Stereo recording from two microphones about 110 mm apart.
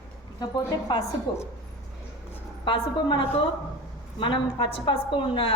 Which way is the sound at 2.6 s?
45° left (ahead or behind).